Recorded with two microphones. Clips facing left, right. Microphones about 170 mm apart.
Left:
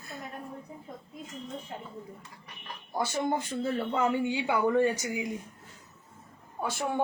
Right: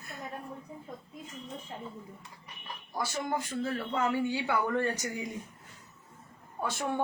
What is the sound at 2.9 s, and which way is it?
Speech, 25° left (ahead or behind).